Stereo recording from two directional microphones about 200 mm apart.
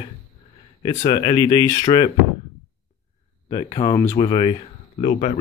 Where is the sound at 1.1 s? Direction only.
20° left (ahead or behind).